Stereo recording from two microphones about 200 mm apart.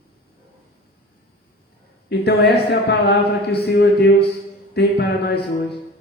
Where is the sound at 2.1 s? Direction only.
55° left (ahead or behind).